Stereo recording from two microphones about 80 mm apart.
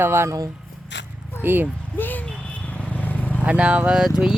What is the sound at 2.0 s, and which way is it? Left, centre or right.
Vehicle, left.